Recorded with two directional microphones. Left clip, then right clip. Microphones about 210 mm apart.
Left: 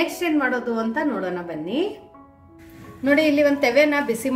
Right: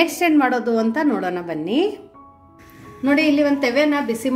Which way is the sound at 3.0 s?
Centre (ahead or behind).